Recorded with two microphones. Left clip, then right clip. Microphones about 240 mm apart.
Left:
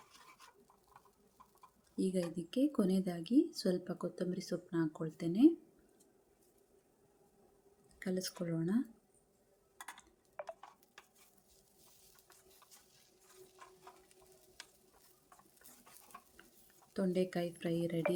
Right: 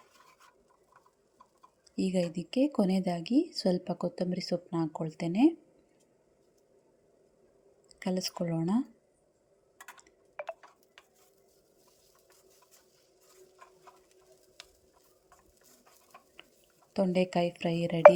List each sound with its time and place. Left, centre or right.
2.0 s speech: right
7.9 s speech: centre
16.9 s speech: centre